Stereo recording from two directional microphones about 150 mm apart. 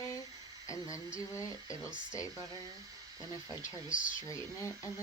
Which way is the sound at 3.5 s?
20° left (ahead or behind).